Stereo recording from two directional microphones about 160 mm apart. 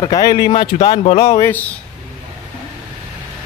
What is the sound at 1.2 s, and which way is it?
Speech, 20° left (ahead or behind).